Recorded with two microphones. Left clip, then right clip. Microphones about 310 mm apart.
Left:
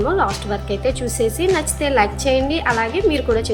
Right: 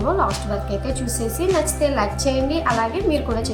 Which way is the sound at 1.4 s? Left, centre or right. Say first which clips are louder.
Even; centre.